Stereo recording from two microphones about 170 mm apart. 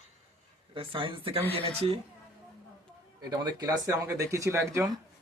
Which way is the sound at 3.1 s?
25° right (ahead or behind).